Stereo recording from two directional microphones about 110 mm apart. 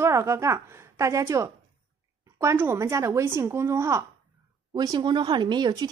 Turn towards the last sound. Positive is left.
turn(degrees=-40)  # may be behind; listen again after turning